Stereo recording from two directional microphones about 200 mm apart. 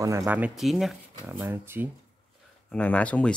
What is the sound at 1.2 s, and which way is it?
Speech, 10° right (ahead or behind).